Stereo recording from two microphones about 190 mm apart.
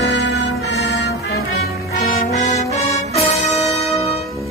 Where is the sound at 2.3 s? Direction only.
35° left (ahead or behind).